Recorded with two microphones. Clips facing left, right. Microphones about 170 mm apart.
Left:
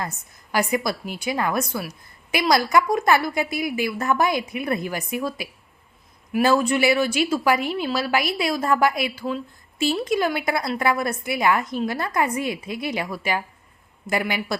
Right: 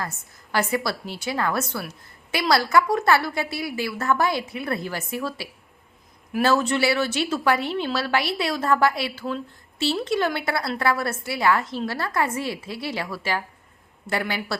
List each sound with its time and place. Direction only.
0.0 s a woman's voice: 15° left (ahead or behind)